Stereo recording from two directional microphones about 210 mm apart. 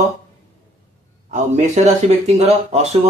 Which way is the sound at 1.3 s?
35° right (ahead or behind).